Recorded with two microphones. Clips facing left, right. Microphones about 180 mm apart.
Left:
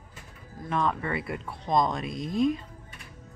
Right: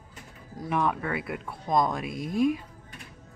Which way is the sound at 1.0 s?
Centre (ahead or behind).